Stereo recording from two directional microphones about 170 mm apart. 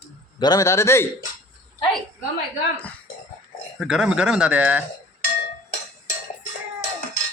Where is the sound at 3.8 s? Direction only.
5° right (ahead or behind).